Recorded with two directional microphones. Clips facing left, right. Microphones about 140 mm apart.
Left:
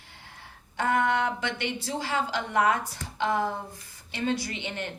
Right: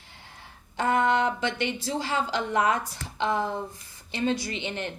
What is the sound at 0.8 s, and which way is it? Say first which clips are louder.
A woman's voice: right 2 dB; 25° right (ahead or behind).